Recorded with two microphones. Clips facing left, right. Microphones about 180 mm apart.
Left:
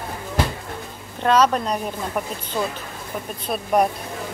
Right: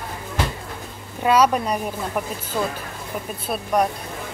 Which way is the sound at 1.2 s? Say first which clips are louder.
Even; 10° right (ahead or behind).